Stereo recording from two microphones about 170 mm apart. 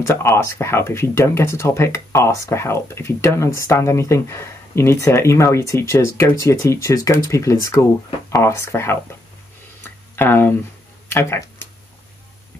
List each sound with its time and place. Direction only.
0.0 s speech: 15° left (ahead or behind)
10.1 s speech: 15° left (ahead or behind)